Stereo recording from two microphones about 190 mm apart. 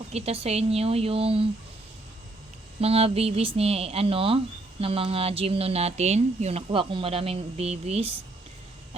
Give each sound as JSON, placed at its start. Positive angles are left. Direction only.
{"t": 0.1, "sound": "speech", "side_deg": -30}
{"t": 2.8, "sound": "speech", "side_deg": -30}